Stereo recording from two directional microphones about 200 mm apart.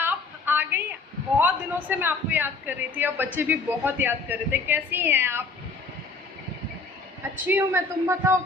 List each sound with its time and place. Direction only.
0.0 s a sound: 10° right (ahead or behind)
1.4 s speech: 10° right (ahead or behind)
7.4 s speech: 10° right (ahead or behind)